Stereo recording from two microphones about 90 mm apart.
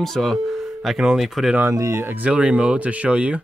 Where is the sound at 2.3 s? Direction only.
10° right (ahead or behind).